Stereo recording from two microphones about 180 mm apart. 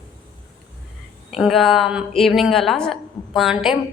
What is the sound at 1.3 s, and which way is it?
A woman's voice, centre (ahead or behind).